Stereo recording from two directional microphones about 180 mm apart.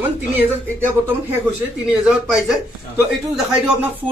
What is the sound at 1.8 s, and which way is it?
Speech, 5° right (ahead or behind).